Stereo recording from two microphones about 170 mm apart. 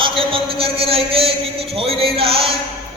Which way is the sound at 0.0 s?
30° right (ahead or behind).